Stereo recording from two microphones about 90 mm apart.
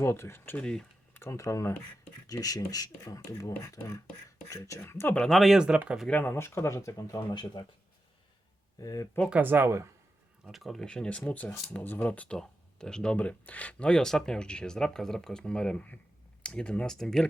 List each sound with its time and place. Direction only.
0.0 s speech: 25° left (ahead or behind)
0.5 s speech: 10° left (ahead or behind)
1.1 s speech: 30° left (ahead or behind)
4.8 s speech: 25° left (ahead or behind)
5.1 s speech: 5° left (ahead or behind); by 6.1 s 10° right (ahead or behind)
6.1 s speech: 15° left (ahead or behind)
6.3 s speech: 30° left (ahead or behind)
7.6 s speech: 65° left (ahead or behind)
8.8 s speech: 40° left (ahead or behind)
9.3 s speech: 20° right (ahead or behind)
10.4 s speech: centre (ahead or behind)